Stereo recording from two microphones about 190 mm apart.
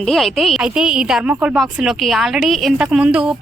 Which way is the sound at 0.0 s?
Centre (ahead or behind).